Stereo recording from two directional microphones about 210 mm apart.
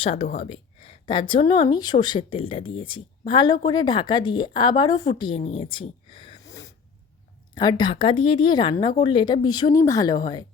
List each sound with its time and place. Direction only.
0.0 s speech: 25° left (ahead or behind)
5.7 s a sound: 25° left (ahead or behind)
7.5 s speech: 20° left (ahead or behind)